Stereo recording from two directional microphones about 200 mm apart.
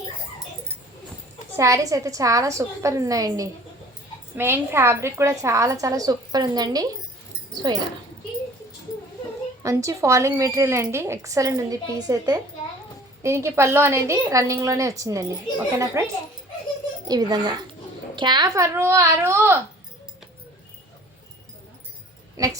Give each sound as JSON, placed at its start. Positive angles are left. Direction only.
{"t": 1.5, "sound": "a woman's voice", "side_deg": -15}
{"t": 9.6, "sound": "a woman's voice", "side_deg": -15}
{"t": 17.1, "sound": "a child's voice", "side_deg": -20}
{"t": 22.4, "sound": "speech", "side_deg": -15}